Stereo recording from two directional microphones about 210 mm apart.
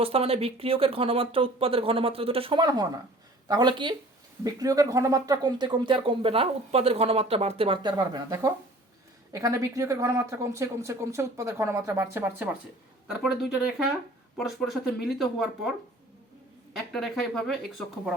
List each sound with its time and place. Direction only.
0.0 s speech: 25° right (ahead or behind); by 15.7 s centre (ahead or behind)
16.7 s speech: centre (ahead or behind)